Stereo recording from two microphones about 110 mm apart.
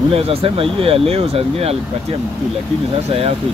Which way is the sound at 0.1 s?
65° right (ahead or behind).